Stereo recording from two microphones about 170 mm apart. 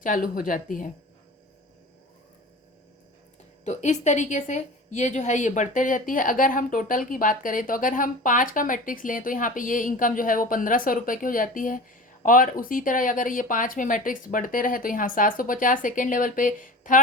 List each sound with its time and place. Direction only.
0.0 s a woman's voice: 55° left (ahead or behind)
3.6 s a woman's voice: 45° left (ahead or behind)